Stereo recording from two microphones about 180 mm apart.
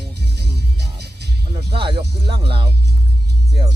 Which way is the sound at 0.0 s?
65° right (ahead or behind).